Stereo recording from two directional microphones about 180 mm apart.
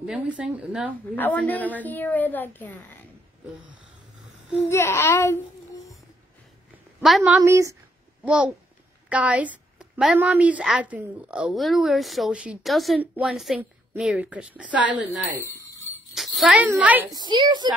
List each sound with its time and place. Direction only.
0.0 s a woman's voice: 5° right (ahead or behind)
1.1 s a woman's voice: 10° left (ahead or behind)
4.6 s a woman's voice: 15° left (ahead or behind)
7.0 s a woman's voice: centre (ahead or behind)
7.4 s a woman's voice: 15° right (ahead or behind)
8.3 s a woman's voice: 5° right (ahead or behind)
15.4 s jingle bell: 15° left (ahead or behind)
16.2 s a child's voice: 5° right (ahead or behind)
17.1 s a woman's voice: 25° right (ahead or behind)